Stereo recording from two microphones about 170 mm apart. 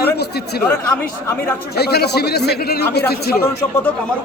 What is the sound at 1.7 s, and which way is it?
A man's voice, 70° left (ahead or behind).